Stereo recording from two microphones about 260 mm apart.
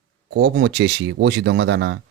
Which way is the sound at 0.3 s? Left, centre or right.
Right.